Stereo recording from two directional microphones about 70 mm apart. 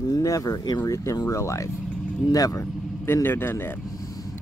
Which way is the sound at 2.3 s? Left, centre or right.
Left.